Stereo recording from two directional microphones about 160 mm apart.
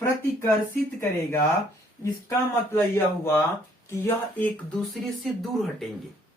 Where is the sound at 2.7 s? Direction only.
15° left (ahead or behind); by 5.9 s centre (ahead or behind).